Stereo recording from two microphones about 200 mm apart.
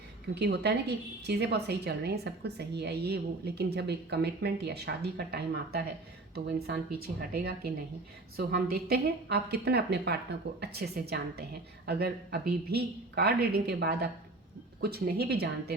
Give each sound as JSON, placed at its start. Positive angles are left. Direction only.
{"t": 0.3, "sound": "a woman's voice", "side_deg": -55}